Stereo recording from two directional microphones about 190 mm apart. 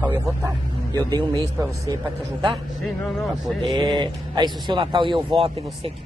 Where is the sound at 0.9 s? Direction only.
20° right (ahead or behind).